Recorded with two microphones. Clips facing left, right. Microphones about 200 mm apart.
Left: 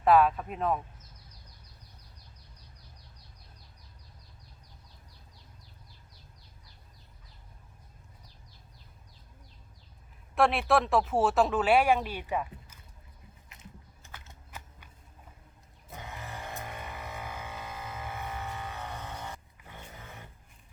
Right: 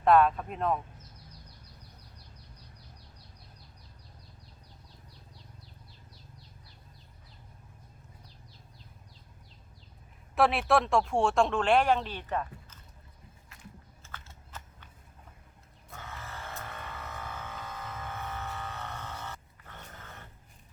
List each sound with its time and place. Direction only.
0.0 s speech: 5° left (ahead or behind)
10.3 s speech: centre (ahead or behind)
13.5 s biting: 20° left (ahead or behind)
15.9 s vehicle: 15° left (ahead or behind)